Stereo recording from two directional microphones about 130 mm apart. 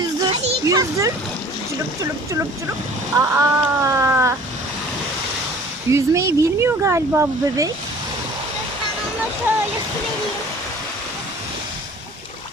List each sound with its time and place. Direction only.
0.6 s a child's voice: 25° right (ahead or behind)
5.9 s speech: 25° right (ahead or behind)
9.5 s speech: 15° right (ahead or behind)